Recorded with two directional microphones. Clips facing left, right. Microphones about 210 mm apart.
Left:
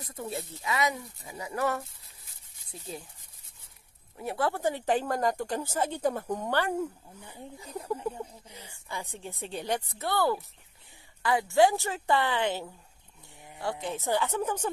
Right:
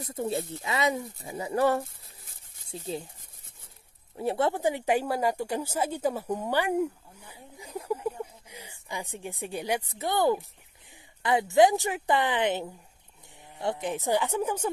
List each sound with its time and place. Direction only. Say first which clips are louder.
0.0 s speech: right 6 dB; 25° right (ahead or behind)
4.2 s speech: right 3 dB; 25° right (ahead or behind); by 7.8 s 10° right (ahead or behind)
7.9 s a sound: right 2 dB; 10° right (ahead or behind)
9.9 s speech: right 4 dB; 20° right (ahead or behind)